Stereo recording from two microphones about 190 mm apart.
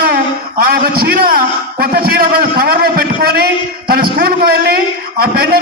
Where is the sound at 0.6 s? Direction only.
55° right (ahead or behind).